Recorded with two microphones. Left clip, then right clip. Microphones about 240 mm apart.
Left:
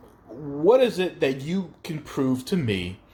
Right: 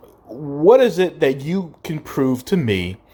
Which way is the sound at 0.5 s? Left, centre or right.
Right.